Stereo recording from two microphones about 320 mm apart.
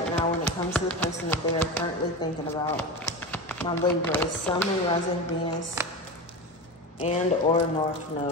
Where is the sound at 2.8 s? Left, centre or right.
Centre.